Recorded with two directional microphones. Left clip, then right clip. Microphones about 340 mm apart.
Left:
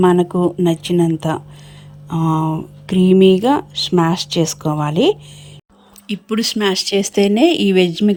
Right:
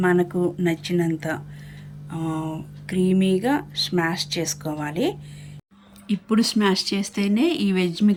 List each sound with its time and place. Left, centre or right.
0.0 s speech: centre
0.3 s speech: left
0.6 s speech: centre
2.8 s speech: centre